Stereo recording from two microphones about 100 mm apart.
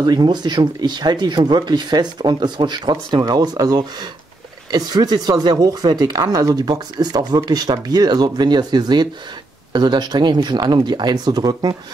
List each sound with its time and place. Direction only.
0.0 s speech: 45° right (ahead or behind)
3.2 s speech: 40° right (ahead or behind)